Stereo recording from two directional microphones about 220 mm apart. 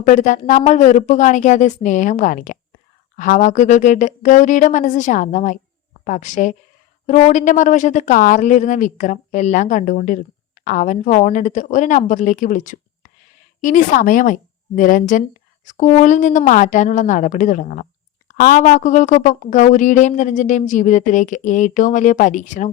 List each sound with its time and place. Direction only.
0.0 s speech: 35° left (ahead or behind)